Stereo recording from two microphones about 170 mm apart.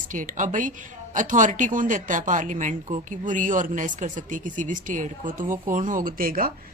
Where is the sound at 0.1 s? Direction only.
50° right (ahead or behind).